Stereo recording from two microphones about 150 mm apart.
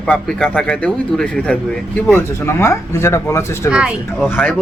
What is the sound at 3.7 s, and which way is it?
Speech, 5° right (ahead or behind).